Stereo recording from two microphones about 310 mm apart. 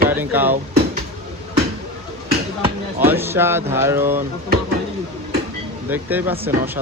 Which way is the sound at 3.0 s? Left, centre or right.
Centre.